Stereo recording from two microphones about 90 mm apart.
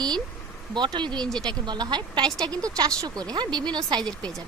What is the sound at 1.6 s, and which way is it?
Speech, 55° right (ahead or behind).